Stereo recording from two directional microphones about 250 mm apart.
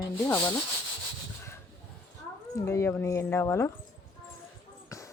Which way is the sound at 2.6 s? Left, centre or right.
Centre.